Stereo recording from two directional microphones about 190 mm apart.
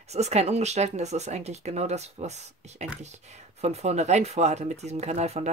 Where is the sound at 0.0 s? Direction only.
35° right (ahead or behind).